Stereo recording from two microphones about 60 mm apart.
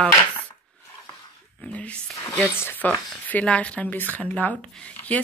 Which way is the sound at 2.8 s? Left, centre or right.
Left.